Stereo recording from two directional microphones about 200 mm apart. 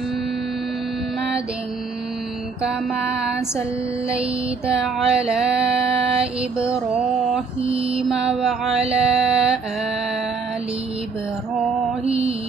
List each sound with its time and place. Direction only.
2.6 s mantra: 5° right (ahead or behind)
4.7 s mantra: 5° right (ahead or behind)
7.6 s mantra: 30° right (ahead or behind)
7.9 s mantra: 5° right (ahead or behind)
12.0 s mantra: 30° right (ahead or behind)